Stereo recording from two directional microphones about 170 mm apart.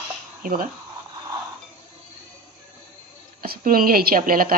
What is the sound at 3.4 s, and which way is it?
A woman's voice, 60° right (ahead or behind).